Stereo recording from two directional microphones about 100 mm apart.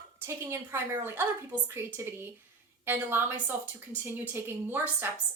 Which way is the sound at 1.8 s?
25° right (ahead or behind).